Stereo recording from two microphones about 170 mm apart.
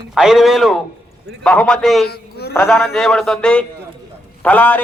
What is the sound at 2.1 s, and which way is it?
Speech, 70° left (ahead or behind).